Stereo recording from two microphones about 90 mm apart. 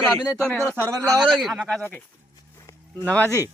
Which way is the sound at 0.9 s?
40° right (ahead or behind).